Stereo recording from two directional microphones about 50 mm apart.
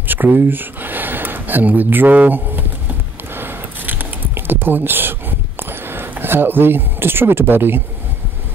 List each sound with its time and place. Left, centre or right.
0.1 s speech: right
3.3 s a sound: right
5.6 s speech: right